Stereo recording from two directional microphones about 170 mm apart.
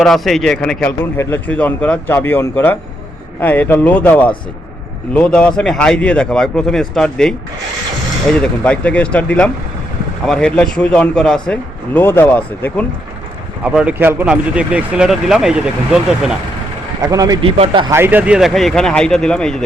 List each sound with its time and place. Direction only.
0.0 s speech: centre (ahead or behind)
13.7 s speech: 5° right (ahead or behind)
17.0 s a man's voice: 20° right (ahead or behind)
17.9 s speech: 10° right (ahead or behind); by 19.6 s 5° left (ahead or behind)